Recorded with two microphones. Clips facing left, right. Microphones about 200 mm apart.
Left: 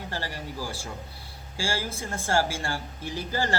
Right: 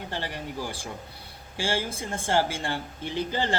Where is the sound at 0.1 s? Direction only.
20° right (ahead or behind).